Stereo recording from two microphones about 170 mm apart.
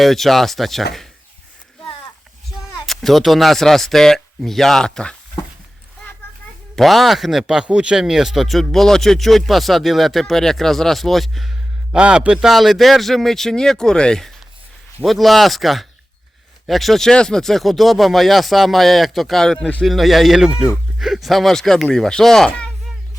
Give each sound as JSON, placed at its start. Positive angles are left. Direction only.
{"t": 0.0, "sound": "speech", "side_deg": 0}
{"t": 2.8, "sound": "speech", "side_deg": 0}
{"t": 6.7, "sound": "speech", "side_deg": 0}